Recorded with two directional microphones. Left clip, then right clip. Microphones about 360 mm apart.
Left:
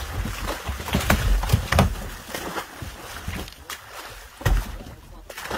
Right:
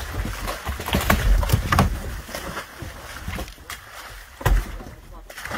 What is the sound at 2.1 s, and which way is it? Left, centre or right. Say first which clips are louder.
Boat: left 1 dB; centre.